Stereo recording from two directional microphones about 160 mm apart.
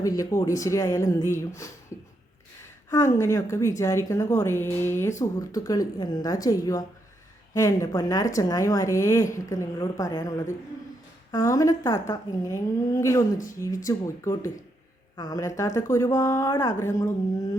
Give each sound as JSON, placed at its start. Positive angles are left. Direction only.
{"t": 0.0, "sound": "a woman's voice", "side_deg": 20}
{"t": 3.2, "sound": "a woman's voice", "side_deg": 20}